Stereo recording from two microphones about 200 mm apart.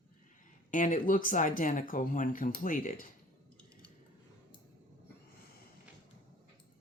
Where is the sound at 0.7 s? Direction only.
40° left (ahead or behind).